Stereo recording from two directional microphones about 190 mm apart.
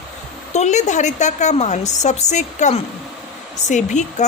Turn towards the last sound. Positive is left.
turn(degrees=40)  # may be behind; listen again after turning